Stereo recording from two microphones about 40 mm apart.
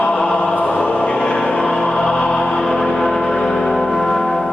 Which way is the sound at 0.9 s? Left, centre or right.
Left.